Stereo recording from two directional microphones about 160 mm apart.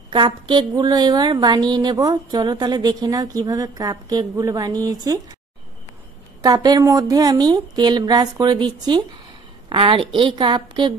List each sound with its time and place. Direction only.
0.1 s a woman's voice: 30° right (ahead or behind)
6.4 s a woman's voice: 25° right (ahead or behind)